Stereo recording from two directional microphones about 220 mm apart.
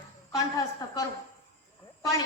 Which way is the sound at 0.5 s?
15° left (ahead or behind).